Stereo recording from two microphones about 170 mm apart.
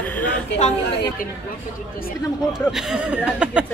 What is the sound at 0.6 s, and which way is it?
Speech, 45° left (ahead or behind).